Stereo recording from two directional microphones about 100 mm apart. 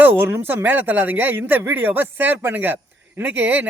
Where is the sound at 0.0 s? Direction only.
20° right (ahead or behind).